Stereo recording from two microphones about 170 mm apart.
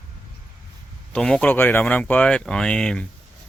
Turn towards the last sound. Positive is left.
turn(degrees=5)  # may be behind; listen again after turning